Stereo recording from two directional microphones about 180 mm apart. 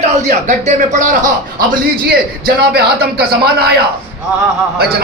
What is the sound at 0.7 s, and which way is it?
Speech, 45° right (ahead or behind).